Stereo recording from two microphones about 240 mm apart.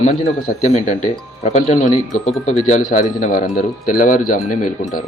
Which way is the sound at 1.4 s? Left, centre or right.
Left.